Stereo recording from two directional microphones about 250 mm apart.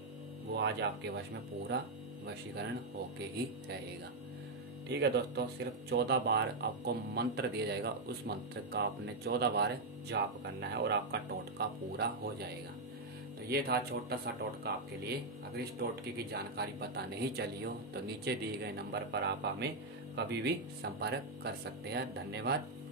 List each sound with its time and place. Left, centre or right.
0.6 s speech: right
4.8 s speech: right
13.5 s speech: right